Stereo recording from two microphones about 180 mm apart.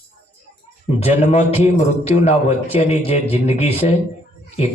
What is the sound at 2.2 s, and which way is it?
A man's voice, 35° left (ahead or behind).